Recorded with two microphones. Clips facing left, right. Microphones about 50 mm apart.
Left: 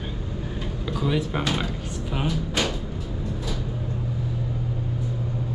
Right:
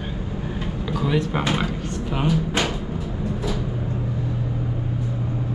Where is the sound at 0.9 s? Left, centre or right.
Centre.